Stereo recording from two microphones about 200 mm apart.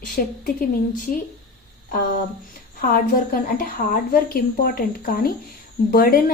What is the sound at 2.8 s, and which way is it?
A woman's voice, 45° left (ahead or behind).